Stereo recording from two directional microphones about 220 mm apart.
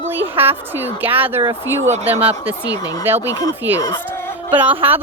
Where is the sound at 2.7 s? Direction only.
15° left (ahead or behind).